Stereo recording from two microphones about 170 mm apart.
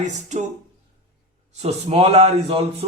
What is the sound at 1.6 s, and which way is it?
Speech, 35° right (ahead or behind).